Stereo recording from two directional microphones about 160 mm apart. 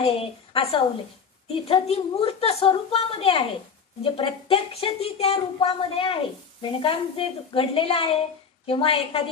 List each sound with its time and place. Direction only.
0.0 s a woman's voice: 35° left (ahead or behind)